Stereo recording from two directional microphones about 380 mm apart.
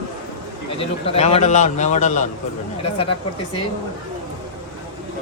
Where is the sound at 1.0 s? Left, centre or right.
Centre.